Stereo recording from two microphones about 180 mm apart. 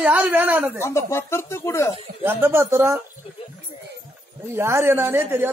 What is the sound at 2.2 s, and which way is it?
Speech, 15° right (ahead or behind).